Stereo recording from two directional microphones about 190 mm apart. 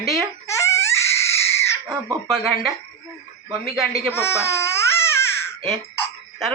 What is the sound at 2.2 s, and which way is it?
Speech, centre (ahead or behind).